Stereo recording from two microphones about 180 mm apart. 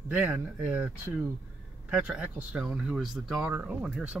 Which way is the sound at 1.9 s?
5° right (ahead or behind).